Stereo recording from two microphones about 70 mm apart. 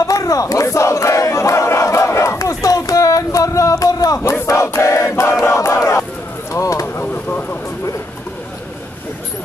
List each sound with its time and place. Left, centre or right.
0.0 s battle cry: left
4.3 s crowd: left
4.6 s battle cry: left
6.5 s a sound: left